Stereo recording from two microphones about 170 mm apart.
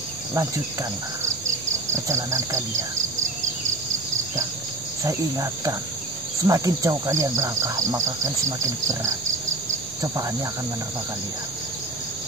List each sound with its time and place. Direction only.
2.0 s cricket: 15° right (ahead or behind)
5.0 s speech: 20° right (ahead or behind)
8.5 s cricket: 15° right (ahead or behind)